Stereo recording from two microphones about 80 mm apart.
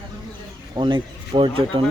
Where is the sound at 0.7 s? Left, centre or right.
Right.